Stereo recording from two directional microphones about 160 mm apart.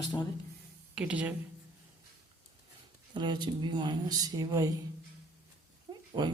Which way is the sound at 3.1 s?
30° right (ahead or behind).